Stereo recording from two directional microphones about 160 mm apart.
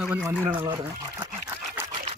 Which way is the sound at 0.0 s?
10° right (ahead or behind).